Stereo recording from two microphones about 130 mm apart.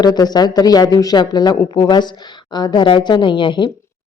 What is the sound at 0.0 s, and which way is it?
Speech, 30° left (ahead or behind).